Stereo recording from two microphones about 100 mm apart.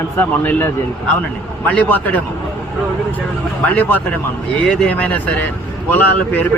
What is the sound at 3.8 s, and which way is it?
A man's voice, 15° left (ahead or behind).